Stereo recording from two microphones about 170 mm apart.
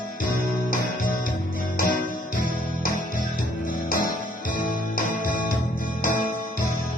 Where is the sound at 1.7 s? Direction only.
55° left (ahead or behind).